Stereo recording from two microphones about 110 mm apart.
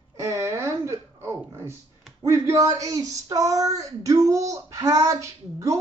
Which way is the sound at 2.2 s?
25° right (ahead or behind).